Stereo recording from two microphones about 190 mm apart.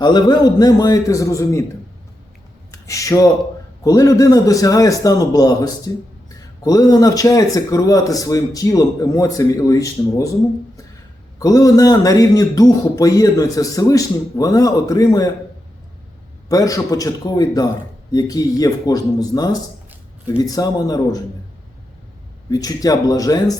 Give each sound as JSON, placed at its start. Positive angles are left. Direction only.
{"t": 0.0, "sound": "a man's voice", "side_deg": 20}
{"t": 2.7, "sound": "a man's voice", "side_deg": 15}
{"t": 11.3, "sound": "a man's voice", "side_deg": 20}
{"t": 16.5, "sound": "a man's voice", "side_deg": 20}
{"t": 22.4, "sound": "a man's voice", "side_deg": 20}